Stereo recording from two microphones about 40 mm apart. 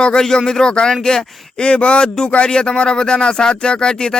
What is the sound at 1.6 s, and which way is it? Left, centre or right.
Speech, left.